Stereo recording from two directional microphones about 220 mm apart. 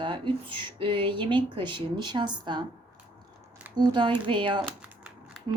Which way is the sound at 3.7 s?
20° right (ahead or behind).